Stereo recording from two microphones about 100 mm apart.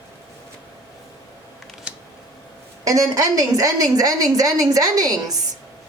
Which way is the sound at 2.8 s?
35° right (ahead or behind).